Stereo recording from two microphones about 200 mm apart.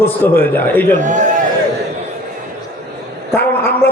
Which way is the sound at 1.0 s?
40° right (ahead or behind).